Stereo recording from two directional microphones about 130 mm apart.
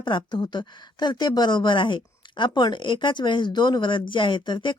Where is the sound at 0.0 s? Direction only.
35° left (ahead or behind).